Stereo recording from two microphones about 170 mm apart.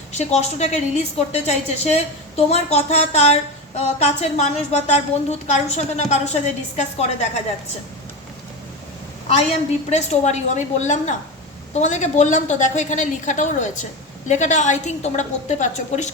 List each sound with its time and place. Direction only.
0.1 s a woman's voice: 40° left (ahead or behind)
9.9 s a woman's voice: 45° left (ahead or behind)